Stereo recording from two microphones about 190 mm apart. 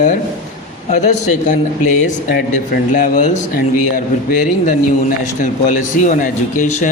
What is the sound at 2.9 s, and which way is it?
Speech, 45° left (ahead or behind).